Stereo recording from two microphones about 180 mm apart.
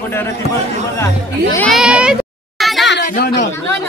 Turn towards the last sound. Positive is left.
turn(degrees=50)  # may be behind; listen again after turning